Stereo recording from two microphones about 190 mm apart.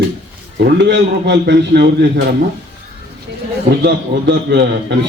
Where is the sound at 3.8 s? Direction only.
60° right (ahead or behind).